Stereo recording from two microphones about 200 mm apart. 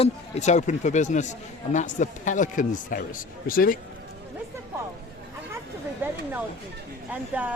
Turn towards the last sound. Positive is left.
turn(degrees=-5)  # may be behind; listen again after turning